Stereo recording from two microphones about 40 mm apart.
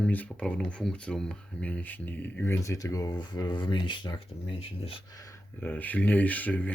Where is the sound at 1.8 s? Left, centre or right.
Left.